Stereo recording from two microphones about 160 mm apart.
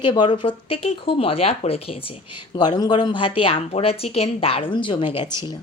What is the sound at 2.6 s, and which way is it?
A woman's voice, 25° left (ahead or behind).